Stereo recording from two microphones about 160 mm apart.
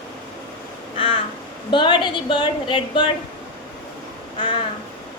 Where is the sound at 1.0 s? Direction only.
35° left (ahead or behind).